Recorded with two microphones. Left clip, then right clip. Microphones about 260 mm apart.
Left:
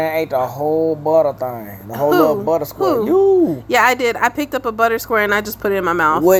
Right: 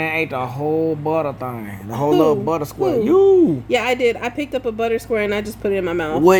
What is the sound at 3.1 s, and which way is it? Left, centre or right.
Speech, right.